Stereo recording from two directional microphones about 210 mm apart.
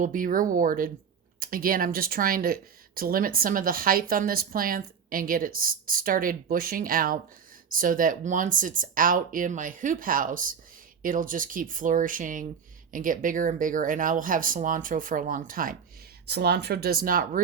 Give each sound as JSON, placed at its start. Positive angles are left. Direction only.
{"t": 0.0, "sound": "speech", "side_deg": -40}